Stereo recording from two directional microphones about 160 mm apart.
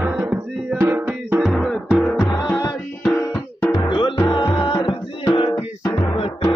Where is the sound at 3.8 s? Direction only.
30° left (ahead or behind).